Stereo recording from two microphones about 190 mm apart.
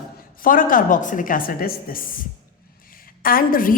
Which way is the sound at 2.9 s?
50° left (ahead or behind).